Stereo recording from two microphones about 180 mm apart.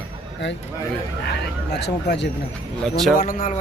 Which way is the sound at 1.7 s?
70° left (ahead or behind).